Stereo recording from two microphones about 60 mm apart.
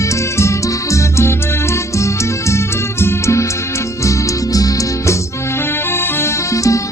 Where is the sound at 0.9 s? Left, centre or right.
Left.